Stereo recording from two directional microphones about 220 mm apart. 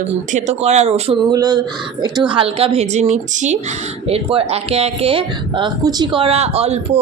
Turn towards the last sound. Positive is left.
turn(degrees=-30)  # may be behind; listen again after turning